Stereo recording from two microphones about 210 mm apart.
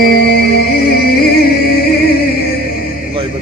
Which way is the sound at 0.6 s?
45° left (ahead or behind).